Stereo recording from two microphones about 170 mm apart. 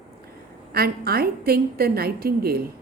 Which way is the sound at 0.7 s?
65° right (ahead or behind).